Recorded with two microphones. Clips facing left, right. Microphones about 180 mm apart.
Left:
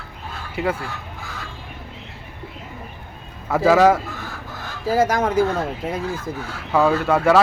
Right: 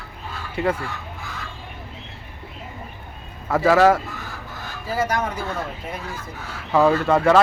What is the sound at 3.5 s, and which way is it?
Speech, 10° left (ahead or behind).